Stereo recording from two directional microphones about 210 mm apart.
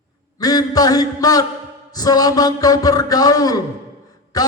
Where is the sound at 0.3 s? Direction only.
20° left (ahead or behind).